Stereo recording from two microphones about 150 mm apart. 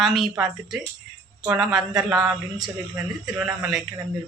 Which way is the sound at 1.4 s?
5° right (ahead or behind).